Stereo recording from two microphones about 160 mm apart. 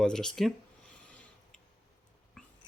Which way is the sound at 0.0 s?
5° left (ahead or behind).